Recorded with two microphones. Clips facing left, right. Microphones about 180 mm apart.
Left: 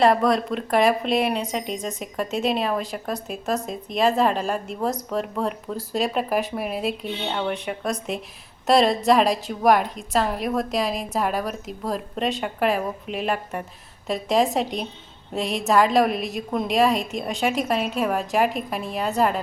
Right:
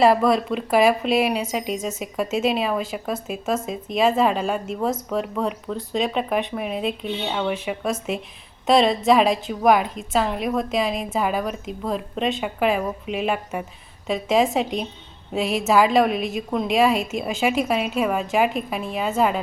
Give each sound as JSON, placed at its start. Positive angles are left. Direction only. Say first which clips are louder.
{"t": 0.0, "sound": "a woman's voice", "louder": "right 2 dB", "side_deg": -5}